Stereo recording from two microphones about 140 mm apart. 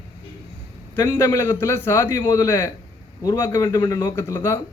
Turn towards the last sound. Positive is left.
turn(degrees=25)  # may be behind; listen again after turning